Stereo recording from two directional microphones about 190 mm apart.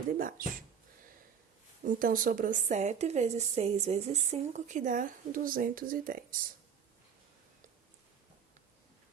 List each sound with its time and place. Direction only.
0.2 s speech: 50° right (ahead or behind)
1.8 s a woman's voice: 45° right (ahead or behind)